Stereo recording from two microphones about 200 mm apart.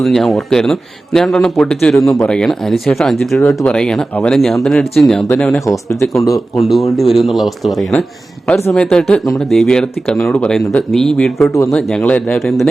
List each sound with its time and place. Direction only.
0.0 s speech: centre (ahead or behind)
5.6 s speech: 15° left (ahead or behind)
6.6 s speech: centre (ahead or behind)